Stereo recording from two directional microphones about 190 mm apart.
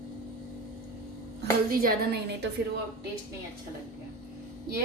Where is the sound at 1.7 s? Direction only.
50° right (ahead or behind).